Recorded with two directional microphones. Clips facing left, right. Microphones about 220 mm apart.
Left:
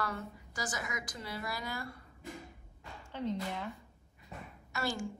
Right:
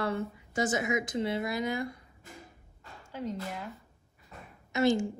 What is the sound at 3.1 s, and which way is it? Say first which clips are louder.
Speech: even; 5° right (ahead or behind).